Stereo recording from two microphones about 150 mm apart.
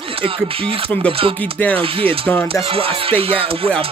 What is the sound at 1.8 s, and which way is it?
Speech, 40° right (ahead or behind).